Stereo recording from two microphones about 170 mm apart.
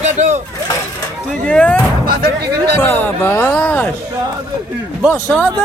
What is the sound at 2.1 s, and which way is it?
Speech, 70° right (ahead or behind).